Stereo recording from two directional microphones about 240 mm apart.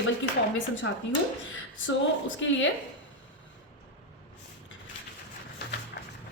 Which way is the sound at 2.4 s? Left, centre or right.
Left.